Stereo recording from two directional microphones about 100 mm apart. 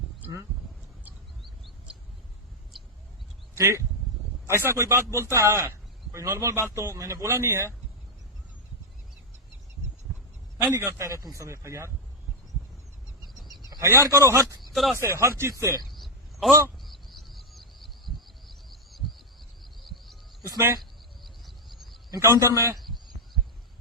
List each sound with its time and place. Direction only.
1.4 s bird: centre (ahead or behind)
3.5 s a man's voice: 30° right (ahead or behind)
10.6 s a man's voice: 25° right (ahead or behind)
14.1 s a man's voice: 25° right (ahead or behind)
14.6 s a sound: centre (ahead or behind)
14.9 s a man's voice: 25° right (ahead or behind)
15.8 s a sound: centre (ahead or behind)
16.5 s a man's voice: 30° right (ahead or behind)
16.8 s bird: centre (ahead or behind)
19.8 s cricket: centre (ahead or behind)
21.2 s a sound: centre (ahead or behind)
22.2 s a man's voice: 30° right (ahead or behind)
22.8 s a sound: centre (ahead or behind)